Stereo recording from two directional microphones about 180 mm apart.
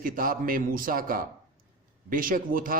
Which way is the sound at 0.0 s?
50° right (ahead or behind).